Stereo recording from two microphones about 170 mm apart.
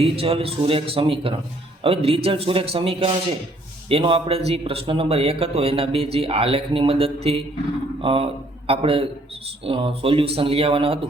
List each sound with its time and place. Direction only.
0.0 s speech: 35° right (ahead or behind)